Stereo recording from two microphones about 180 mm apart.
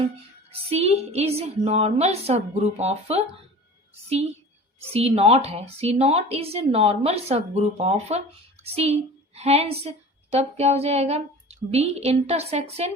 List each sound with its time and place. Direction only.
0.5 s speech: 35° right (ahead or behind)
4.9 s a woman's voice: 35° right (ahead or behind)